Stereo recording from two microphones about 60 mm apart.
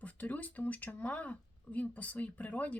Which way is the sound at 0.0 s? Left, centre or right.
Left.